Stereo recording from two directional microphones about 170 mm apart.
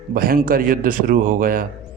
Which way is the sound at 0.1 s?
55° right (ahead or behind).